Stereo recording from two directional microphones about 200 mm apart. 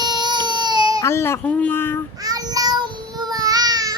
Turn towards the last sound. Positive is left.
turn(degrees=-20)  # may be behind; listen again after turning